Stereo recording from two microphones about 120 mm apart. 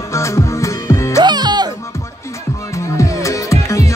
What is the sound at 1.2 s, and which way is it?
Music, 35° right (ahead or behind).